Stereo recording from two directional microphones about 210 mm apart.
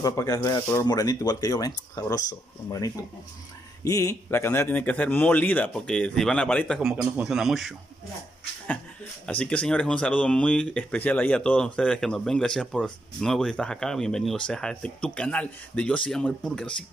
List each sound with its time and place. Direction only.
0.0 s a man's voice: 15° left (ahead or behind)
3.8 s a man's voice: 15° left (ahead or behind); by 7.7 s centre (ahead or behind)
9.2 s speech: 5° left (ahead or behind)